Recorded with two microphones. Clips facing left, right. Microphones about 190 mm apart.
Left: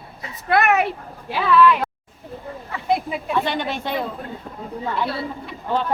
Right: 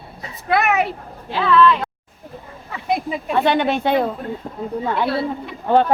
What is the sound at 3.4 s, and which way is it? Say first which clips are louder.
Speech: right 8 dB; 60° right (ahead or behind).